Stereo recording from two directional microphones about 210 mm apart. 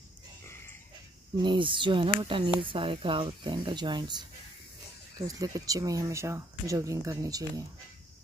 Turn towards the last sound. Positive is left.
turn(degrees=-15)  # may be behind; listen again after turning